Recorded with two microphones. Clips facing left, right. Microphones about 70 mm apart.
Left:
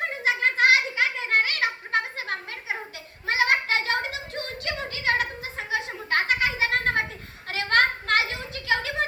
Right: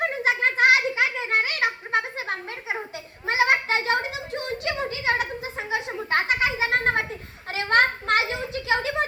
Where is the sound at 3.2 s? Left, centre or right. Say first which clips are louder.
Right 2 dB; right.